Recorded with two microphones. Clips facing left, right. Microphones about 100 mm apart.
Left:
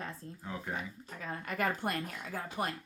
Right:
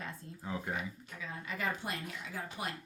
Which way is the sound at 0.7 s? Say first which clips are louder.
Even; 50° left (ahead or behind).